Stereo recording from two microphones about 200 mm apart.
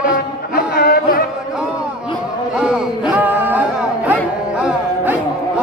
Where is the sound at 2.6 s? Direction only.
5° right (ahead or behind).